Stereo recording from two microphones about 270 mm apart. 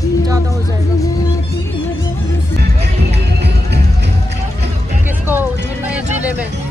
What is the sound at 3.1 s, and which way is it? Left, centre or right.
Music, right.